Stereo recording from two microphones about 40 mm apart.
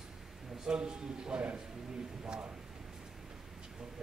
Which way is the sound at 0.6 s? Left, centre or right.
Centre.